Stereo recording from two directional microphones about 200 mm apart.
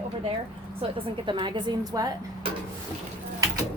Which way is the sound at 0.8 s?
25° right (ahead or behind).